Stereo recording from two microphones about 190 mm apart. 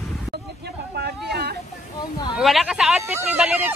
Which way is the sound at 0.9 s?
60° right (ahead or behind).